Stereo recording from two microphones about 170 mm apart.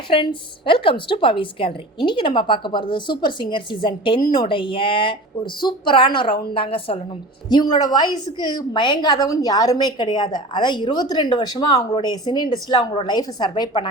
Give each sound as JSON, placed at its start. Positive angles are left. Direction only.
{"t": 0.1, "sound": "a woman's voice", "side_deg": 30}